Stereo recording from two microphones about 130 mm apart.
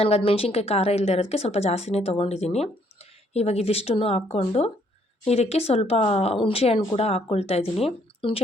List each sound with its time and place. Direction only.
0.0 s a woman's voice: 45° left (ahead or behind)